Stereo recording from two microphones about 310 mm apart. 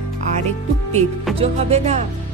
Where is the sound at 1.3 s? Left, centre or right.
Centre.